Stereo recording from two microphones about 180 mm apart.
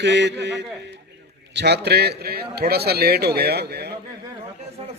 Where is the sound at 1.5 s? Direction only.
65° right (ahead or behind).